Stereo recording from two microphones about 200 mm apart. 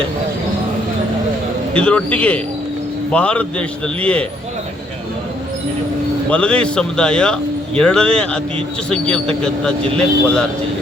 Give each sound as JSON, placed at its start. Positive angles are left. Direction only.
{"t": 1.7, "sound": "a man's voice", "side_deg": 5}
{"t": 6.3, "sound": "a man's voice", "side_deg": 5}